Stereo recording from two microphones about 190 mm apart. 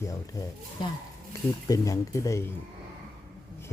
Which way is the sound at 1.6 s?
15° left (ahead or behind).